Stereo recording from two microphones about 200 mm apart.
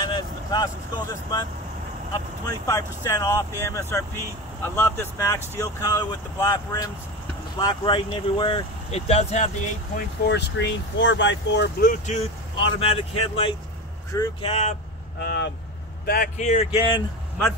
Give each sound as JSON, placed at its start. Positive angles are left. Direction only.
{"t": 0.0, "sound": "speech", "side_deg": 20}
{"t": 2.4, "sound": "speech", "side_deg": 15}
{"t": 10.2, "sound": "speech", "side_deg": 55}
{"t": 11.8, "sound": "speech", "side_deg": 40}
{"t": 12.5, "sound": "speech", "side_deg": 30}
{"t": 15.1, "sound": "speech", "side_deg": 55}
{"t": 16.1, "sound": "speech", "side_deg": 40}